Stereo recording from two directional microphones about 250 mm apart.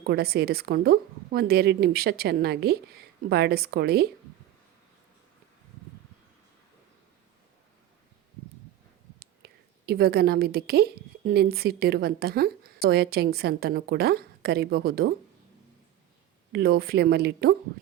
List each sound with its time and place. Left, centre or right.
0.0 s a woman's voice: right
9.1 s a woman's voice: right
16.5 s a woman's voice: right